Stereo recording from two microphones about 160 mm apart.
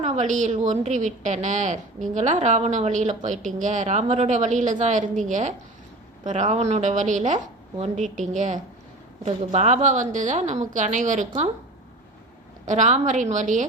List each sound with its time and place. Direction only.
0.0 s a woman's voice: 50° right (ahead or behind)
12.6 s a woman's voice: 50° right (ahead or behind)